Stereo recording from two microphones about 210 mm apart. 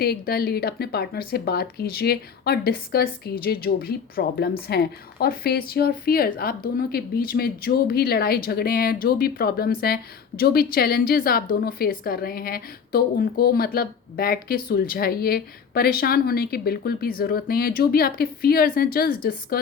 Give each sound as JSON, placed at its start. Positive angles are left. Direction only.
{"t": 0.0, "sound": "speech", "side_deg": 50}